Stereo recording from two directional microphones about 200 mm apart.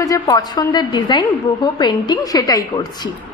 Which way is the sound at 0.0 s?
20° left (ahead or behind).